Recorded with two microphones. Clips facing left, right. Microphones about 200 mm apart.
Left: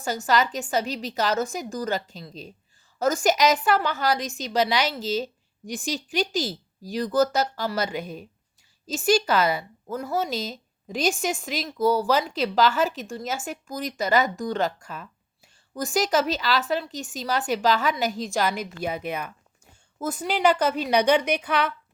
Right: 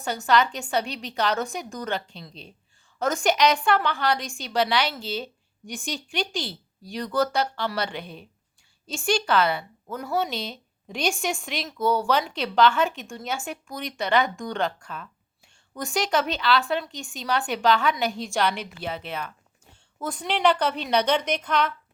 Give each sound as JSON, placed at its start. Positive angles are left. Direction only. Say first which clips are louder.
{"t": 0.0, "sound": "a woman's voice", "louder": "right 1 dB", "side_deg": 5}
{"t": 3.0, "sound": "a woman's voice", "louder": "left 1 dB", "side_deg": 5}
{"t": 4.8, "sound": "a woman's voice", "louder": "left 3 dB", "side_deg": 40}
{"t": 6.9, "sound": "a woman's voice", "louder": "left 3 dB", "side_deg": 5}
{"t": 8.0, "sound": "speech", "louder": "left 5 dB", "side_deg": 45}
{"t": 8.9, "sound": "a woman's voice", "louder": "left 3 dB", "side_deg": 5}
{"t": 16.9, "sound": "speech", "louder": "left 4 dB", "side_deg": 40}
{"t": 17.5, "sound": "a woman's voice", "louder": "even", "side_deg": 5}